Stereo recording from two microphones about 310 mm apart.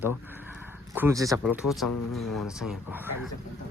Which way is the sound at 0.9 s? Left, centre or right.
Centre.